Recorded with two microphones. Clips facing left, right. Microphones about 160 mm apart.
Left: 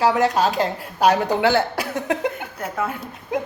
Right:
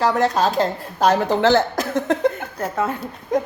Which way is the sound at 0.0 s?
10° left (ahead or behind).